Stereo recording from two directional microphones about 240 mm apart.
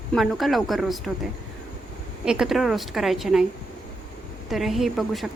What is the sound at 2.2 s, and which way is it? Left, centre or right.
Speech, centre.